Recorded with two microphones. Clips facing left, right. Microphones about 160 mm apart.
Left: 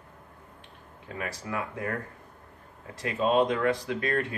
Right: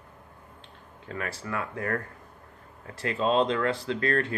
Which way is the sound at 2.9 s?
15° left (ahead or behind).